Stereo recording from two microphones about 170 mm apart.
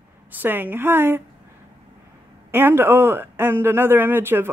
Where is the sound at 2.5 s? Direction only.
15° right (ahead or behind).